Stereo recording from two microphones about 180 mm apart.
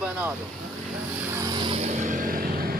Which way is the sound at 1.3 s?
20° right (ahead or behind).